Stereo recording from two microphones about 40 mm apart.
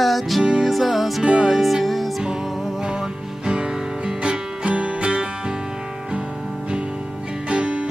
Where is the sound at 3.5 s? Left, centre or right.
Right.